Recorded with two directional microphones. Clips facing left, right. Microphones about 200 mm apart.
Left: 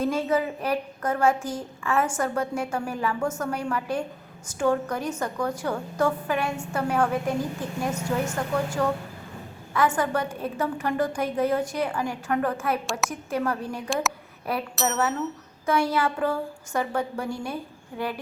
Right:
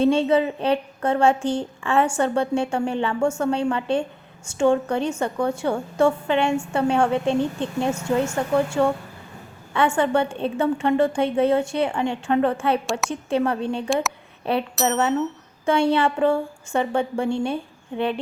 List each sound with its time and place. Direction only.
0.0 s a woman's voice: 30° right (ahead or behind)